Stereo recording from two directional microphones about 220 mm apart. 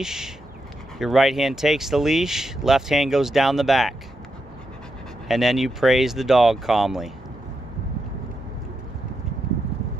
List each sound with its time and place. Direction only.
0.0 s speech: 5° right (ahead or behind)
5.3 s speech: centre (ahead or behind)